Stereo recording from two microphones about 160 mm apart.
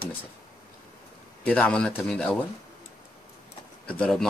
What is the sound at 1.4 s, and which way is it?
Speech, 5° left (ahead or behind).